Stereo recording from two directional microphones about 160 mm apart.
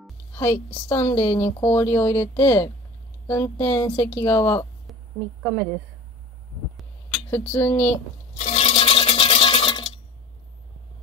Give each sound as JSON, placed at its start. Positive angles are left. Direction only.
{"t": 0.3, "sound": "a sound", "side_deg": 15}
{"t": 0.8, "sound": "a woman's voice", "side_deg": 15}
{"t": 4.9, "sound": "a sound", "side_deg": 0}
{"t": 5.4, "sound": "a woman's voice", "side_deg": 0}
{"t": 7.2, "sound": "a woman's voice", "side_deg": 15}
{"t": 8.4, "sound": "toothbrush", "side_deg": 40}